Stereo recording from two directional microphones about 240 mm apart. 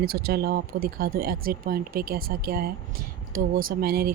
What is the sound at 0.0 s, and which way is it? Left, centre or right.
Speech, right.